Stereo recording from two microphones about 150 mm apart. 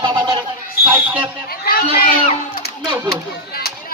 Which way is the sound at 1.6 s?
90° left.